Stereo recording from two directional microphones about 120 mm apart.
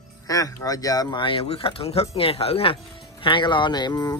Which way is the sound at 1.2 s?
50° left (ahead or behind).